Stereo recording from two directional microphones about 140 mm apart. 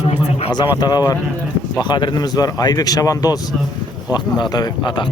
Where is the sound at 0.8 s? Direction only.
30° left (ahead or behind).